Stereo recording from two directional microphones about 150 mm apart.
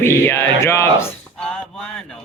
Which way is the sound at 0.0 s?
15° left (ahead or behind).